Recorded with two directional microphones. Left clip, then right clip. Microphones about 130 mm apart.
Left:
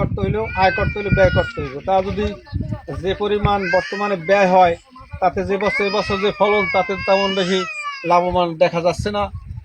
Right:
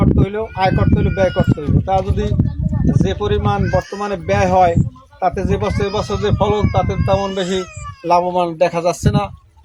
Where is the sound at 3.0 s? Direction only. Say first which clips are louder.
Left 2 dB; 10° right (ahead or behind).